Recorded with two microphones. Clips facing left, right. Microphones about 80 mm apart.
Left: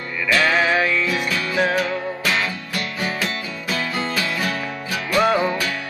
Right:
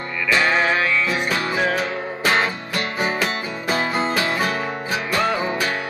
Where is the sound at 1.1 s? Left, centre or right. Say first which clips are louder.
Even; right.